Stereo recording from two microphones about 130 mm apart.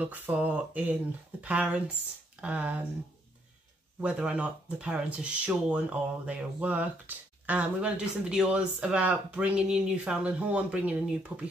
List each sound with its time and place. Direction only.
0.0 s speech: 10° right (ahead or behind)
4.0 s speech: 10° right (ahead or behind)